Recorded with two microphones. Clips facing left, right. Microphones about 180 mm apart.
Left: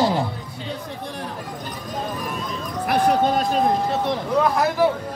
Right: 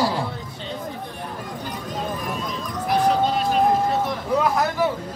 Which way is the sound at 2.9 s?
50° left (ahead or behind).